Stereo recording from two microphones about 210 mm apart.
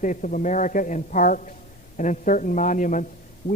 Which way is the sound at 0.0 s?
35° left (ahead or behind).